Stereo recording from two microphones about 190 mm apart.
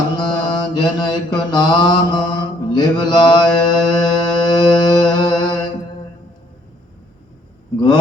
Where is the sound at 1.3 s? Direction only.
25° left (ahead or behind).